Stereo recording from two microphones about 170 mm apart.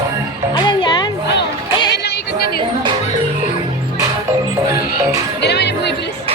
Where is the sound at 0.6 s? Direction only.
25° left (ahead or behind).